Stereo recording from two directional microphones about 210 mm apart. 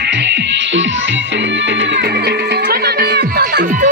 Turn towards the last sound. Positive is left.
turn(degrees=-50)  # may be behind; listen again after turning